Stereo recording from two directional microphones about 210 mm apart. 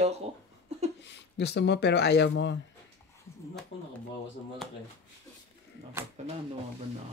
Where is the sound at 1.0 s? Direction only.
55° left (ahead or behind).